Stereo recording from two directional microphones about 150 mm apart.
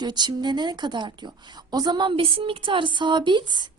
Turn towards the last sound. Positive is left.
turn(degrees=-30)  # may be behind; listen again after turning